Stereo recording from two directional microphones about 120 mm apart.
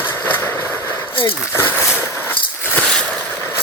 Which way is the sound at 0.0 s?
20° left (ahead or behind).